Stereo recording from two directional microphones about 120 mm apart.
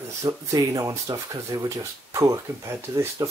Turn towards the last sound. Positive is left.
turn(degrees=-25)  # may be behind; listen again after turning